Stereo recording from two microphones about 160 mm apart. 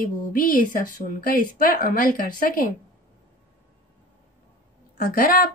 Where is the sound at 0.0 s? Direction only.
60° left (ahead or behind).